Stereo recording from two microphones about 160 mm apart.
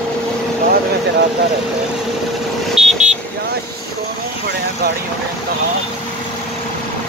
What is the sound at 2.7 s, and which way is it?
Vehicle, 5° right (ahead or behind).